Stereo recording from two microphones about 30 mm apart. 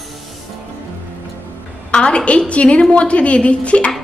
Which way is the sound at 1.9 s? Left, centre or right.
Left.